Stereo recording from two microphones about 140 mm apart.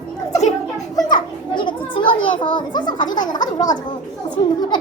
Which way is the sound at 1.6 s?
35° left (ahead or behind).